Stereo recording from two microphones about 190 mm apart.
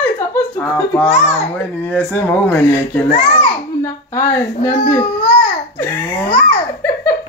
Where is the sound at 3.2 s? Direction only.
25° left (ahead or behind).